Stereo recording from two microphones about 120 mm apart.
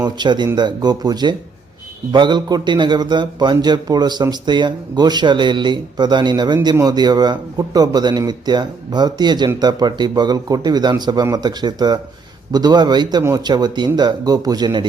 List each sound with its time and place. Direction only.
0.0 s a man's voice: 40° right (ahead or behind)